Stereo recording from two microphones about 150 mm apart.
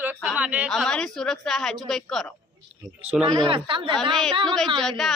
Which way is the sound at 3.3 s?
35° right (ahead or behind).